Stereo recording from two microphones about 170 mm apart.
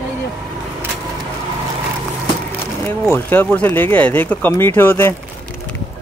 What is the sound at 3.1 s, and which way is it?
Speech, 10° left (ahead or behind).